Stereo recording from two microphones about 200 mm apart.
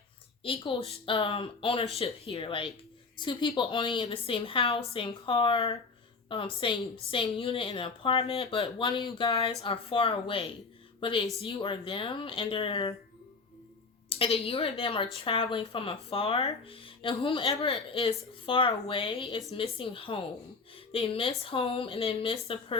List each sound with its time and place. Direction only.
0.4 s a woman's voice: 25° left (ahead or behind)
14.1 s a woman's voice: 30° left (ahead or behind)